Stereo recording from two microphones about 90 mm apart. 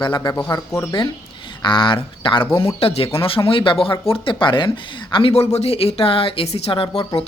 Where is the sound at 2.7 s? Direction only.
90° left.